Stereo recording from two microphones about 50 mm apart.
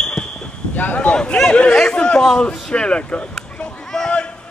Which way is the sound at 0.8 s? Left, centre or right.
Left.